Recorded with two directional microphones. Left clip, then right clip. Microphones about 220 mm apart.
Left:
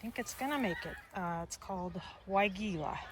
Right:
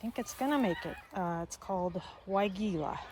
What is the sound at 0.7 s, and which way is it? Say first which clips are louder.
Speech: right 4 dB; 40° right (ahead or behind).